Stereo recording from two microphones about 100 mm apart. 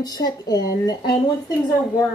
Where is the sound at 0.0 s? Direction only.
40° left (ahead or behind).